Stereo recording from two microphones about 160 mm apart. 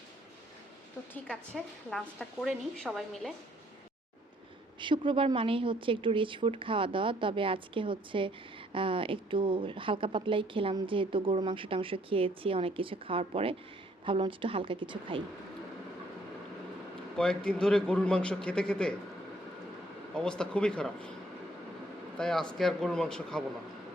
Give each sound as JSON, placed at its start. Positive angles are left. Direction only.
{"t": 1.1, "sound": "a woman's voice", "side_deg": 5}
{"t": 4.8, "sound": "speech", "side_deg": -30}
{"t": 17.2, "sound": "a woman's voice", "side_deg": 5}
{"t": 20.1, "sound": "a woman's voice", "side_deg": 5}
{"t": 22.2, "sound": "a woman's voice", "side_deg": 5}